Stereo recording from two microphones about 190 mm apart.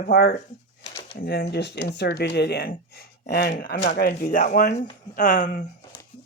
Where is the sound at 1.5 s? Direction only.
65° left (ahead or behind); by 5.6 s 40° left (ahead or behind).